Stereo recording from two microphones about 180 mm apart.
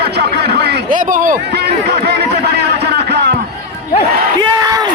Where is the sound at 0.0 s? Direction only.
65° right (ahead or behind).